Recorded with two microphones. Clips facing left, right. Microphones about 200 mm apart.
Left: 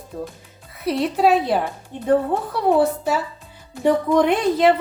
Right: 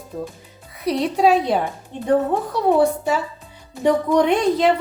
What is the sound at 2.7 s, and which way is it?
Speech, centre (ahead or behind).